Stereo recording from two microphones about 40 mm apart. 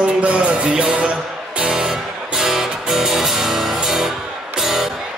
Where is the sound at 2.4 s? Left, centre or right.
Centre.